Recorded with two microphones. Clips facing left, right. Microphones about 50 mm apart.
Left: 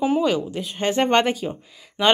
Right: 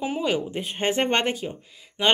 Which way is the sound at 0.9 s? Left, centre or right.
Centre.